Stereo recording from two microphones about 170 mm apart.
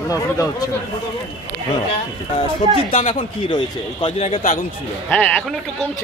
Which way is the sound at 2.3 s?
35° left (ahead or behind).